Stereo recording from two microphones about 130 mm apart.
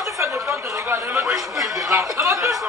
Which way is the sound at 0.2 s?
20° right (ahead or behind).